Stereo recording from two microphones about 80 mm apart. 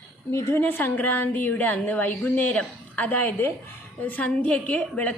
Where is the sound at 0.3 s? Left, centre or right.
Left.